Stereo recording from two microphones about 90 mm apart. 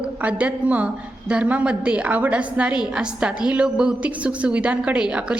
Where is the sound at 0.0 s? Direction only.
15° right (ahead or behind).